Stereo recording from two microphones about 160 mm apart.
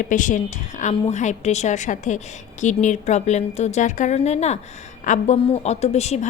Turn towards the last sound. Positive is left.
turn(degrees=45)  # may be behind; listen again after turning